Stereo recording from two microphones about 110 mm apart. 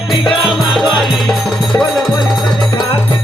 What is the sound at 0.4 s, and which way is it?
Music, 5° right (ahead or behind).